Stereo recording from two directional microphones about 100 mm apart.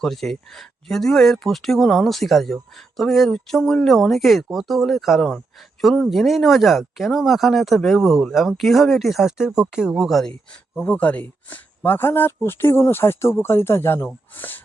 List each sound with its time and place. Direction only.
0.0 s speech: 5° left (ahead or behind)
10.8 s speech: 15° left (ahead or behind)